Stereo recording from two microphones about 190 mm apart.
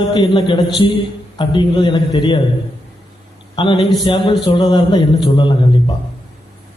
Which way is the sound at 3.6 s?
25° left (ahead or behind).